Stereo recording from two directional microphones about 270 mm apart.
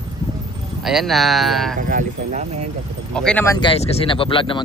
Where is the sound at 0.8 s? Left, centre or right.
Centre.